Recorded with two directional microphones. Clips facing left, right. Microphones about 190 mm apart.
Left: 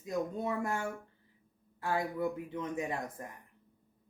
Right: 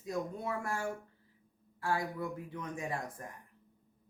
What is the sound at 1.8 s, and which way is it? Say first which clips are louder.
Speech: left 2 dB; 20° left (ahead or behind).